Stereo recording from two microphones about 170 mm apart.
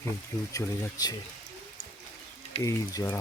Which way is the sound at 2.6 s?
20° left (ahead or behind).